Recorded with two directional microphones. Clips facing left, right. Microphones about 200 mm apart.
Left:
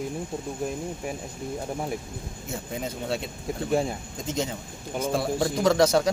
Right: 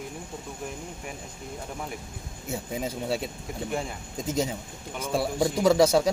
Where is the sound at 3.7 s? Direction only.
35° left (ahead or behind).